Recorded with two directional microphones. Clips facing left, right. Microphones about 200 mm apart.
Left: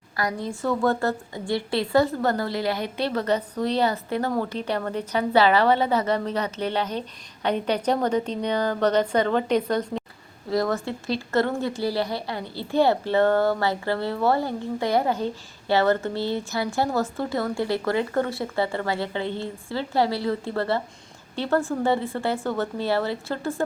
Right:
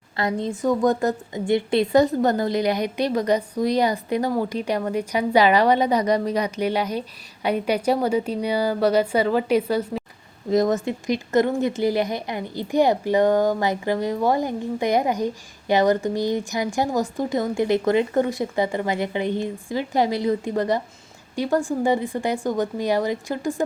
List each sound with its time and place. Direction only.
0.2 s a woman's voice: 25° right (ahead or behind); by 10.0 s 10° right (ahead or behind)
10.5 s a woman's voice: 20° right (ahead or behind)